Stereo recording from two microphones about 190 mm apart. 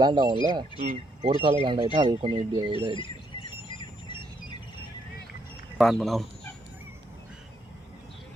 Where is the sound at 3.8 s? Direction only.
25° left (ahead or behind).